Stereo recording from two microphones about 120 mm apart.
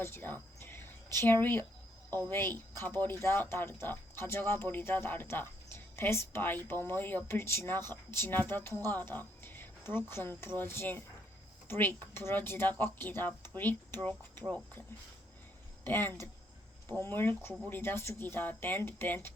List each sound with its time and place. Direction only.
0.0 s speech: 20° left (ahead or behind)
0.6 s a sound: 20° left (ahead or behind)
2.1 s speech: 20° left (ahead or behind)
15.8 s speech: 15° left (ahead or behind)